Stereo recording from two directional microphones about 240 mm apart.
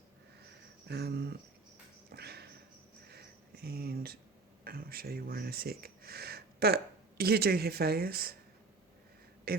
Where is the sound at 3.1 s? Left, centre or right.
Right.